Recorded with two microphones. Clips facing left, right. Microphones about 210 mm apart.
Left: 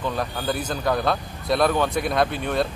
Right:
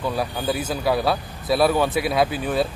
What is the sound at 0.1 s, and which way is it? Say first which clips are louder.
Speech: right 2 dB; 5° right (ahead or behind).